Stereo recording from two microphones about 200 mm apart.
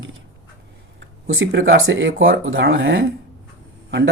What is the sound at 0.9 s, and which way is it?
Speech, 70° right (ahead or behind).